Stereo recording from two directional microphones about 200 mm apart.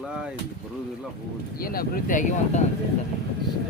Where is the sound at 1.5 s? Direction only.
45° left (ahead or behind).